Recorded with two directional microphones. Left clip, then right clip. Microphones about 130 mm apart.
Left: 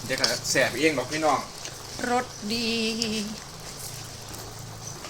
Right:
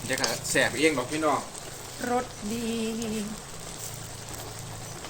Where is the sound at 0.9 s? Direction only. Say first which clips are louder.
Left 2 dB; 25° right (ahead or behind).